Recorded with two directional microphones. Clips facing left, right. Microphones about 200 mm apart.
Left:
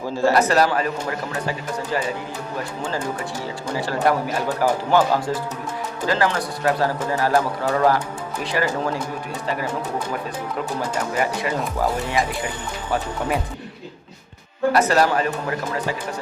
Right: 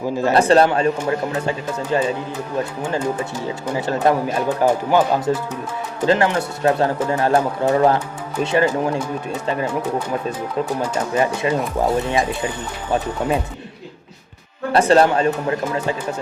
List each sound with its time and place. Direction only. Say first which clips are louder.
0.2 s speech: right 3 dB; 25° right (ahead or behind)
10.8 s speech: right 2 dB; 25° right (ahead or behind)
14.7 s speech: right 4 dB; 30° right (ahead or behind)